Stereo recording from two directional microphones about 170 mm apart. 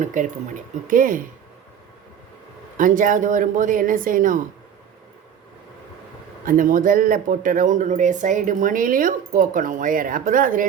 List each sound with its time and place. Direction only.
0.0 s a man's voice: 50° right (ahead or behind)
2.7 s a man's voice: 50° right (ahead or behind)
6.4 s a man's voice: 55° right (ahead or behind)